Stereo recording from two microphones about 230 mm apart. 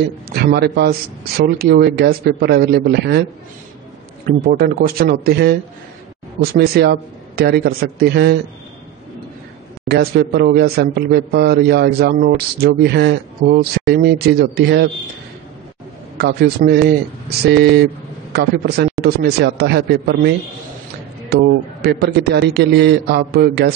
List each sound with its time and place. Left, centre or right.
0.0 s a man's voice: right
4.5 s a man's voice: right
9.8 s a man's voice: right
16.2 s a man's voice: right